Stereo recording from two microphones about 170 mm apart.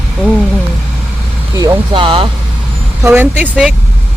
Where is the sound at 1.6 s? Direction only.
30° right (ahead or behind).